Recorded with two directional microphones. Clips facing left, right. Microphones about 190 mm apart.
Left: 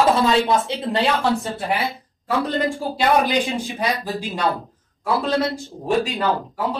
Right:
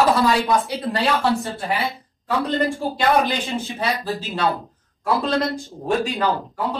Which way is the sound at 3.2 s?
15° left (ahead or behind).